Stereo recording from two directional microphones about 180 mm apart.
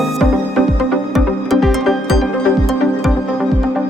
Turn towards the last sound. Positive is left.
turn(degrees=0)  # may be behind; listen again after turning